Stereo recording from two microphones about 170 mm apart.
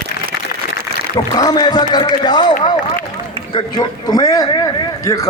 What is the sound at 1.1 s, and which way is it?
A man's voice, 20° left (ahead or behind).